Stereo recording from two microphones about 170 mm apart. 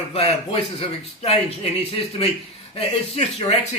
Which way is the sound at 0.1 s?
35° left (ahead or behind).